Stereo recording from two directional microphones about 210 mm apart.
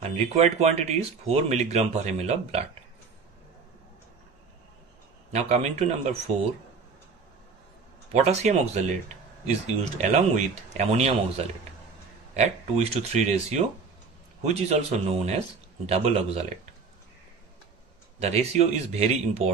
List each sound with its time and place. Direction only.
0.0 s speech: 30° right (ahead or behind)
5.3 s speech: 30° right (ahead or behind)
8.1 s speech: 30° right (ahead or behind)
18.2 s speech: 30° right (ahead or behind)